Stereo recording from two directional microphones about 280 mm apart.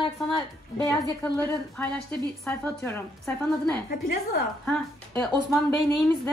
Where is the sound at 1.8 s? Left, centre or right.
Centre.